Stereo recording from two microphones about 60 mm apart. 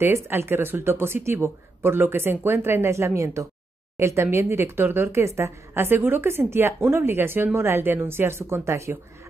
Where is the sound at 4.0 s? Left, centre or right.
Right.